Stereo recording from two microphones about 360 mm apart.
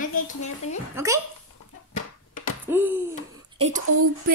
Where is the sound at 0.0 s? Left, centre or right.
Left.